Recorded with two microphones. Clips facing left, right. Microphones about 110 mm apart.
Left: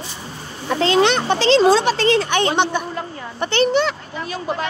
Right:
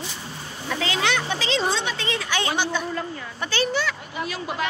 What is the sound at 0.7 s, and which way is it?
Speech, 45° left (ahead or behind).